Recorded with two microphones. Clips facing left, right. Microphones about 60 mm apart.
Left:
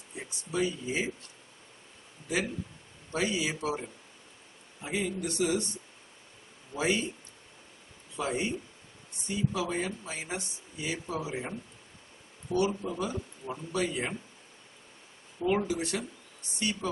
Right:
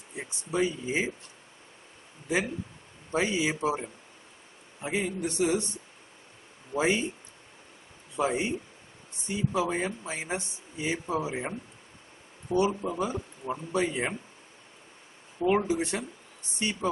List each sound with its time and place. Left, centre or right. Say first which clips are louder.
0.1 s speech: right 3 dB; right
3.1 s speech: right 3 dB; right
6.7 s speech: right 3 dB; right
8.2 s speech: right 4 dB; right
15.3 s speech: right 3 dB; right